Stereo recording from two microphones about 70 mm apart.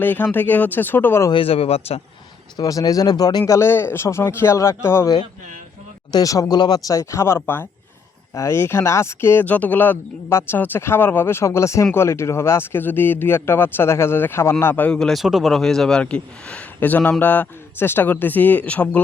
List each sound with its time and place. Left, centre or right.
0.0 s a man's voice: left
2.6 s speech: left
3.4 s speech: left
6.2 s speech: left
6.6 s speech: left
7.0 s speech: left
8.4 s speech: left
9.4 s a man's voice: left
14.8 s a man's voice: centre
15.2 s a man's voice: centre